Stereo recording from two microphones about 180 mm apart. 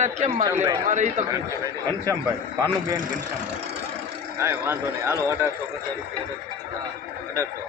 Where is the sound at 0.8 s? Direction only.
40° right (ahead or behind).